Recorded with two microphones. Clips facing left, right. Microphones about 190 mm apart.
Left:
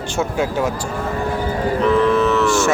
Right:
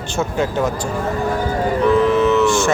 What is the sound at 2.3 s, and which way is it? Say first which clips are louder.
Music: right 1 dB; 5° left (ahead or behind).